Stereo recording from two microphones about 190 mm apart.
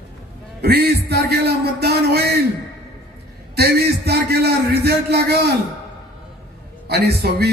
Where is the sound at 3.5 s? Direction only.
55° right (ahead or behind).